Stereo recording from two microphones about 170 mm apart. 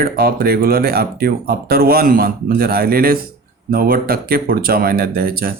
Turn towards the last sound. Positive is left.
turn(degrees=-60)  # may be behind; listen again after turning